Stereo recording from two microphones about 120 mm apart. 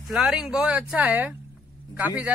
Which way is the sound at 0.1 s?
5° right (ahead or behind).